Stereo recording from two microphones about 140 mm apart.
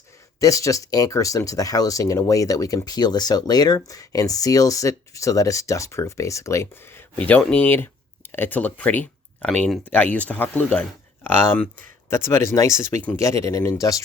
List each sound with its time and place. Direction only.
0.3 s speech: 25° left (ahead or behind)